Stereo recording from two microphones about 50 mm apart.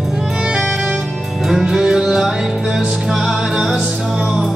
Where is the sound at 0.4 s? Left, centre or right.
Centre.